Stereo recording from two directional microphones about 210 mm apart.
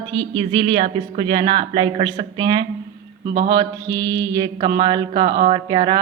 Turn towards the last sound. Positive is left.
turn(degrees=-20)  # may be behind; listen again after turning